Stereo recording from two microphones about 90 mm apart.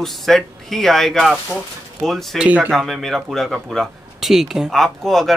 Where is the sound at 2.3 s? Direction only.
15° right (ahead or behind).